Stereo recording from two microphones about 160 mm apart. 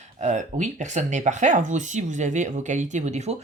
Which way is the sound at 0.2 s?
50° right (ahead or behind).